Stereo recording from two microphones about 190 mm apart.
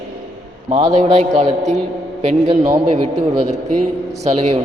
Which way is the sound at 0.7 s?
35° right (ahead or behind).